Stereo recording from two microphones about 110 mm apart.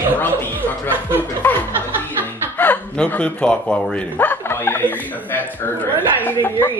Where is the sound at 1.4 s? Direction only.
15° left (ahead or behind).